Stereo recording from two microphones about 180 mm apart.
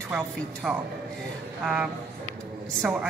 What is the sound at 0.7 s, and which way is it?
A woman's voice, 5° right (ahead or behind).